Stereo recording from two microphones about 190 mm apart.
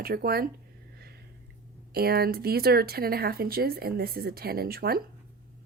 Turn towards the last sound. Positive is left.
turn(degrees=-55)  # may be behind; listen again after turning